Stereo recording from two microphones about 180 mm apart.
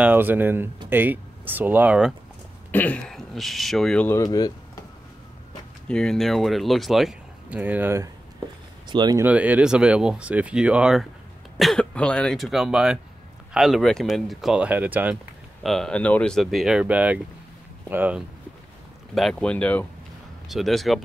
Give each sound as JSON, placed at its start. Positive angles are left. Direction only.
{"t": 0.0, "sound": "speech", "side_deg": -10}
{"t": 2.7, "sound": "speech", "side_deg": 10}
{"t": 4.2, "sound": "speech", "side_deg": 20}
{"t": 5.9, "sound": "speech", "side_deg": 5}
{"t": 8.8, "sound": "speech", "side_deg": -25}
{"t": 9.2, "sound": "speech", "side_deg": -10}
{"t": 15.6, "sound": "speech", "side_deg": 0}
{"t": 19.1, "sound": "speech", "side_deg": 5}